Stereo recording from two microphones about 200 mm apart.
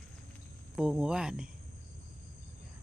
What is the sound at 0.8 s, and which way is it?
Speech, 5° right (ahead or behind).